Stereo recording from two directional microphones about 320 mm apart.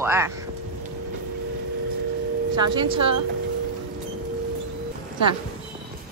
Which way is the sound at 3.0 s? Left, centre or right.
Right.